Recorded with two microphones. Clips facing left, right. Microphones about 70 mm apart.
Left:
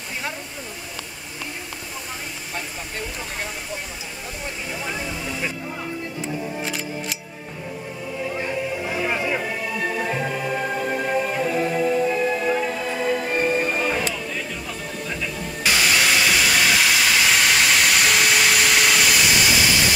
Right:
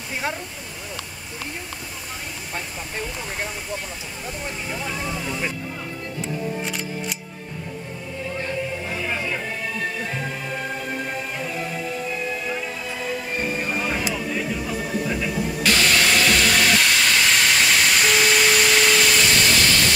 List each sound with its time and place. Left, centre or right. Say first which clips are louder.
4.7 s speech: right 1 dB; centre
6.2 s music: right 2 dB; centre
8.4 s music: even; centre
11.4 s music: left 7 dB; left
13.3 s music: left 4 dB; left
13.6 s music: left 3 dB; centre
15.6 s steam: even; centre